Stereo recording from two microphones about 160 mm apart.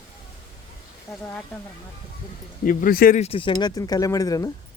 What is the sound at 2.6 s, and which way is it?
Speech, 60° left (ahead or behind).